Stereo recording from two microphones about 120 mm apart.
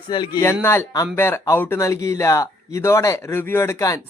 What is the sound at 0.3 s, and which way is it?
Speech, 20° left (ahead or behind).